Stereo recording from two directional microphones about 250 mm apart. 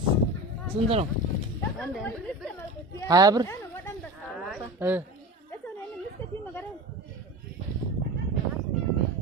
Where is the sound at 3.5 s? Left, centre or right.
Centre.